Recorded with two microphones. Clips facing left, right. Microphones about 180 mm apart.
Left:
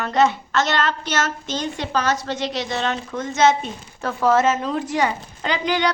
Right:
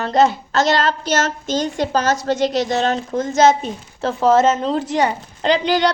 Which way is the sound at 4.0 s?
25° right (ahead or behind).